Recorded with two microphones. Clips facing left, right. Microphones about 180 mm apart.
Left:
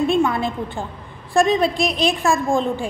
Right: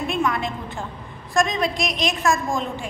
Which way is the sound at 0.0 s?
30° left (ahead or behind).